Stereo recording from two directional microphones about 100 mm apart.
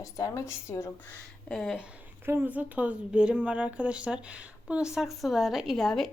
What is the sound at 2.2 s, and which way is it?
Speech, 20° right (ahead or behind).